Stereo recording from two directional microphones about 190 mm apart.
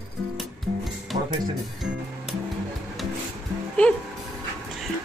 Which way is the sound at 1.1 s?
40° right (ahead or behind).